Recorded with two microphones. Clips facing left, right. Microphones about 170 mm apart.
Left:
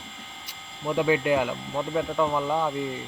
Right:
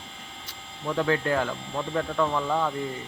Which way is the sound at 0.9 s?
15° left (ahead or behind).